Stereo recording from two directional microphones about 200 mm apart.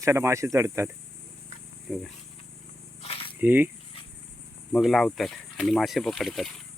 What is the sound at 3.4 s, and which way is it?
Speech, 10° right (ahead or behind).